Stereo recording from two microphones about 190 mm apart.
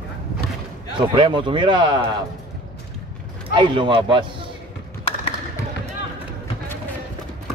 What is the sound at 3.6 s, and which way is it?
Speech, 25° right (ahead or behind).